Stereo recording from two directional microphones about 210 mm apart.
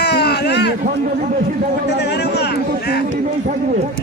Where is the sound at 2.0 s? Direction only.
50° left (ahead or behind).